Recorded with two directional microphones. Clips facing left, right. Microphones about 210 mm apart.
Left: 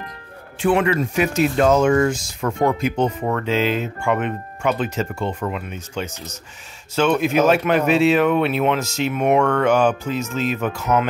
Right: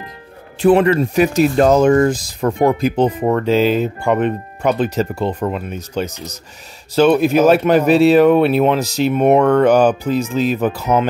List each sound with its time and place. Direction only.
0.6 s speech: 35° right (ahead or behind)